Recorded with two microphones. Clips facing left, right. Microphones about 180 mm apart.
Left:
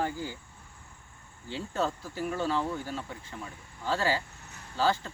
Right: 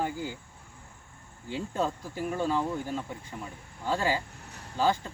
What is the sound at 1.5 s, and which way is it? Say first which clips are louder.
Speech: right 1 dB; 15° right (ahead or behind).